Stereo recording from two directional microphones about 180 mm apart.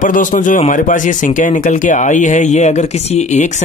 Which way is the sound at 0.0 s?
45° left (ahead or behind).